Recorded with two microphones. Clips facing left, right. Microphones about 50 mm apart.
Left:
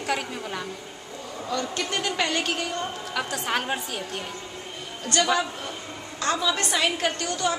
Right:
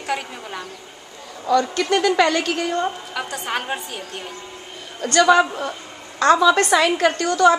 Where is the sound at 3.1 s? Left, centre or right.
Centre.